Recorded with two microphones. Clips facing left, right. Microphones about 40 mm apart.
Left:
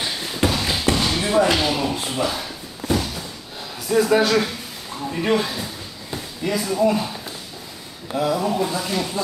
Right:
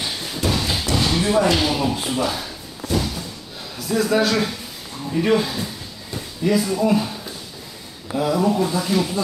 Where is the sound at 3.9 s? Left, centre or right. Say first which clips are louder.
Left 2 dB; centre.